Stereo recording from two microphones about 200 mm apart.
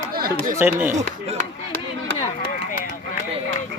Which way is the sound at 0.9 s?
35° right (ahead or behind).